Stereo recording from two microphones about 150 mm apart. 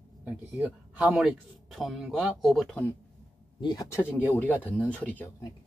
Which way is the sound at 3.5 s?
30° left (ahead or behind).